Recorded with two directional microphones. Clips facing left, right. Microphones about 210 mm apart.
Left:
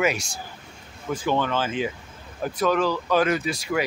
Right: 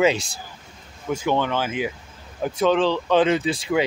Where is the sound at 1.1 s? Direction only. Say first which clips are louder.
Right 2 dB; 20° right (ahead or behind).